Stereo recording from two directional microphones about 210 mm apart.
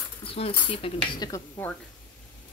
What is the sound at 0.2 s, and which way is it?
Speech, 25° left (ahead or behind).